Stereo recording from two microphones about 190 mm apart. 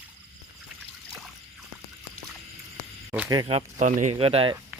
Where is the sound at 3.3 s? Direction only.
25° right (ahead or behind).